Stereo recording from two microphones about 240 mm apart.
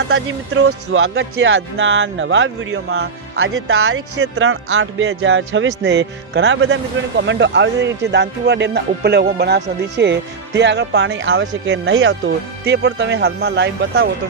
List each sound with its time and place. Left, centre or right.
0.1 s speech: right